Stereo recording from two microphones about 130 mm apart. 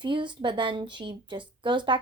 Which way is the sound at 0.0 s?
35° right (ahead or behind).